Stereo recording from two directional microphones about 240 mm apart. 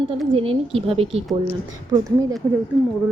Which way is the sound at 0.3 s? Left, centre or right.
Right.